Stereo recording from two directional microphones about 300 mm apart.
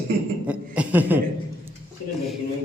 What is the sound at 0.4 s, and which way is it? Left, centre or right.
Chuckle, centre.